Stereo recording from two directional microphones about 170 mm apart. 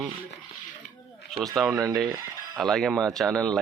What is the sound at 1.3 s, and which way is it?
Speech, 5° left (ahead or behind).